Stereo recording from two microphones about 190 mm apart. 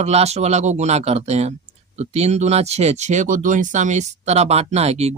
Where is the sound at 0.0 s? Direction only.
35° right (ahead or behind).